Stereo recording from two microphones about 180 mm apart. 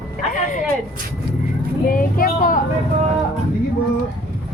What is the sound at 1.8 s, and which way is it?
Speech, 50° left (ahead or behind).